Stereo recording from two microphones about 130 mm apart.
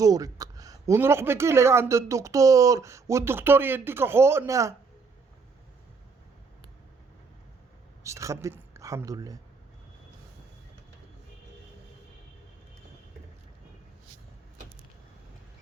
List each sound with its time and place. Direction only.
0.0 s a sound: 25° right (ahead or behind)
0.9 s speech: 20° right (ahead or behind)
8.0 s speech: 25° right (ahead or behind)